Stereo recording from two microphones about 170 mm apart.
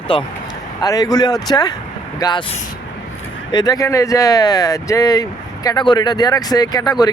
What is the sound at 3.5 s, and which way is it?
Speech, 25° left (ahead or behind).